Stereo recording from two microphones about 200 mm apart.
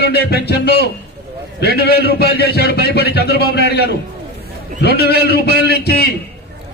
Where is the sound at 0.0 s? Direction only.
55° left (ahead or behind).